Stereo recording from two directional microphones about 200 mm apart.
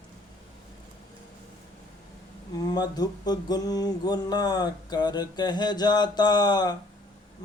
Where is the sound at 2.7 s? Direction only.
20° left (ahead or behind).